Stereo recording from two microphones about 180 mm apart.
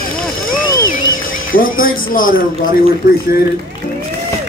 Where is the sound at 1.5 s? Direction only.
50° left (ahead or behind).